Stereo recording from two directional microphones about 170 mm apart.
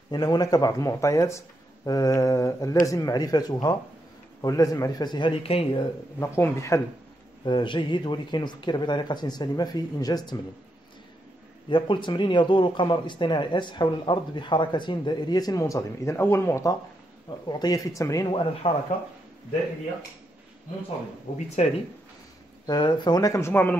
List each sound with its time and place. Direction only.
0.1 s speech: 25° left (ahead or behind)
6.1 s speech: 15° left (ahead or behind)
7.4 s speech: 30° left (ahead or behind)
11.7 s speech: 25° left (ahead or behind)
21.3 s speech: 50° left (ahead or behind)
22.7 s speech: 25° left (ahead or behind)